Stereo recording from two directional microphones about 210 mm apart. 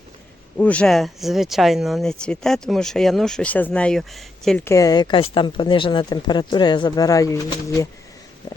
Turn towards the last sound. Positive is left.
turn(degrees=15)  # may be behind; listen again after turning